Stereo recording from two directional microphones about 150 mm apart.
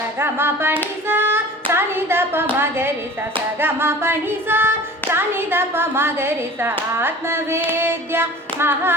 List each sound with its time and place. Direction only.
0.2 s speech: 15° right (ahead or behind)
1.0 s a sound: 15° right (ahead or behind)
1.7 s clapping: 15° right (ahead or behind)
3.6 s speech: 15° right (ahead or behind)